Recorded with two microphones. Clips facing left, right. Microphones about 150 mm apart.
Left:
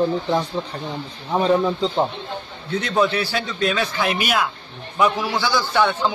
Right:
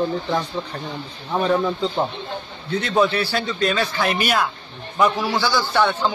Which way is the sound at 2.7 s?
Centre (ahead or behind).